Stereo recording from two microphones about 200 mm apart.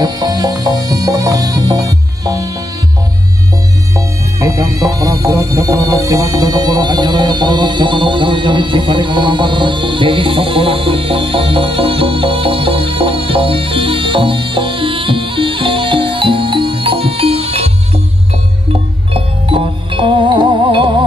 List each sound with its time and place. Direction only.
0.0 s music: 20° right (ahead or behind)
3.9 s music: 15° right (ahead or behind)
19.1 s music: 25° right (ahead or behind)